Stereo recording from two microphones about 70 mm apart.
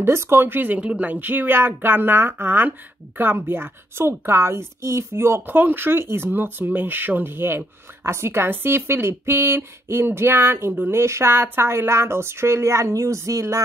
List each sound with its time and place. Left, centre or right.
0.0 s a woman's voice: right